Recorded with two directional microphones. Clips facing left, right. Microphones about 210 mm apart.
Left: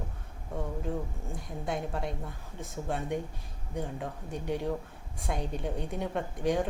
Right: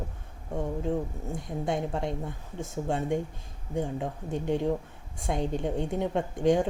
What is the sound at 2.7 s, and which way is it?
A woman's voice, 25° right (ahead or behind).